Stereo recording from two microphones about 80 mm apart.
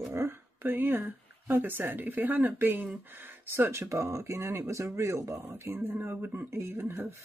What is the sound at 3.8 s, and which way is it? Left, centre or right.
Speech, right.